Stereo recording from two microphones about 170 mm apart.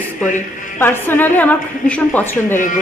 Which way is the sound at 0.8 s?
15° left (ahead or behind).